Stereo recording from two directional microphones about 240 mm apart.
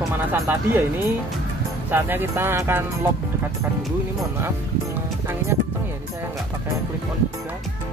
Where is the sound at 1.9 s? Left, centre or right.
Centre.